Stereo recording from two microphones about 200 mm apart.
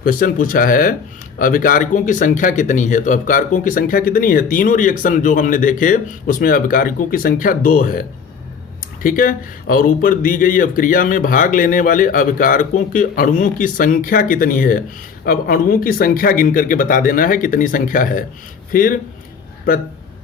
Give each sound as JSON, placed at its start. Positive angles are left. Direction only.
{"t": 0.0, "sound": "speech", "side_deg": 45}
{"t": 9.0, "sound": "speech", "side_deg": 45}